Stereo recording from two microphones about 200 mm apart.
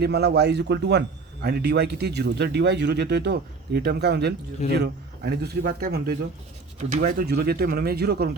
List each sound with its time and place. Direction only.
0.0 s a man's voice: 55° right (ahead or behind)
6.7 s speech: 35° right (ahead or behind)
7.2 s a man's voice: 50° right (ahead or behind)